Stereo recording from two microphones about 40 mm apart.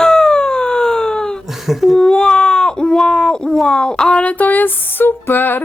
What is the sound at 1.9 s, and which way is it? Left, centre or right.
Speech, centre.